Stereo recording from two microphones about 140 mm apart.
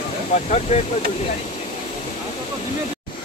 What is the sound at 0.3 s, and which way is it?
Speech, 55° left (ahead or behind).